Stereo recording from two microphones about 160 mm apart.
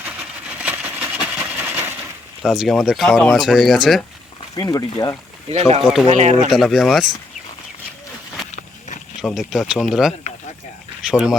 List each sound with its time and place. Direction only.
0.6 s vehicle: 10° right (ahead or behind)
2.4 s speech: 5° right (ahead or behind)
4.5 s speech: 25° left (ahead or behind)
5.5 s speech: 40° right (ahead or behind)
5.8 s speech: centre (ahead or behind)
6.1 s speech: 45° right (ahead or behind)
6.5 s speech: centre (ahead or behind)
9.2 s speech: centre (ahead or behind)